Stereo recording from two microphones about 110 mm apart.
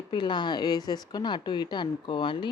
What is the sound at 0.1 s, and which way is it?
A woman's voice, 40° left (ahead or behind).